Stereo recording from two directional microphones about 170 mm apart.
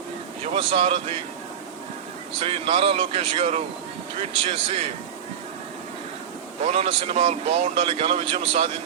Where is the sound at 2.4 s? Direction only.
35° right (ahead or behind).